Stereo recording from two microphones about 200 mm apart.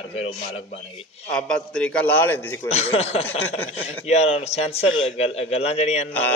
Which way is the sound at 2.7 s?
30° left (ahead or behind).